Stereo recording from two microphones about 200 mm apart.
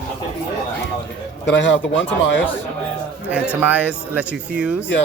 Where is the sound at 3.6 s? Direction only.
5° right (ahead or behind).